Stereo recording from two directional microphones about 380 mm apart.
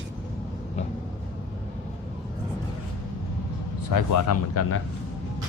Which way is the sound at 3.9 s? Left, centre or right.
Left.